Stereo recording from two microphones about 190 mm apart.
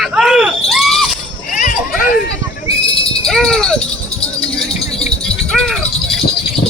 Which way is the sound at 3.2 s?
5° left (ahead or behind).